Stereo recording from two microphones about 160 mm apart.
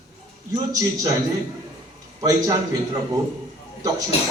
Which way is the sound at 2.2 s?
20° right (ahead or behind).